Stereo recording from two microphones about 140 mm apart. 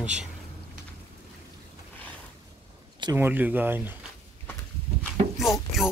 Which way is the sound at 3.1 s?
15° right (ahead or behind).